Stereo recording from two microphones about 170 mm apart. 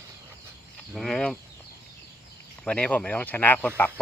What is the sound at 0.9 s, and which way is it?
Speech, centre (ahead or behind).